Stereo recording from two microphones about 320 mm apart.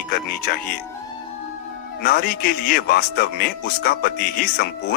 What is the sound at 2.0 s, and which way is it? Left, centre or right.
Speech, left.